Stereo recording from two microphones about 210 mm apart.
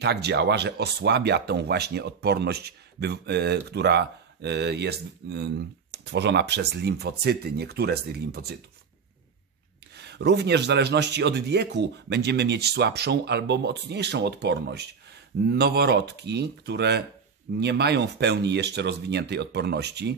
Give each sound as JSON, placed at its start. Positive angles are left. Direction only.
{"t": 0.0, "sound": "speech", "side_deg": -55}
{"t": 9.9, "sound": "speech", "side_deg": -55}